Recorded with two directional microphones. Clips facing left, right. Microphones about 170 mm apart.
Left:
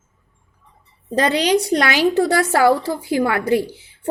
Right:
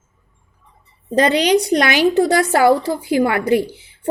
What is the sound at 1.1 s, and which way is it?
Speech, 20° right (ahead or behind).